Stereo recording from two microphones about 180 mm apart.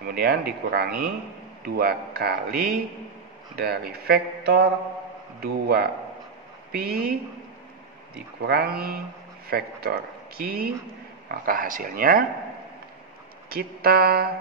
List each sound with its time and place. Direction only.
0.1 s speech: 60° right (ahead or behind)
8.4 s speech: 60° right (ahead or behind)
13.5 s speech: 55° right (ahead or behind)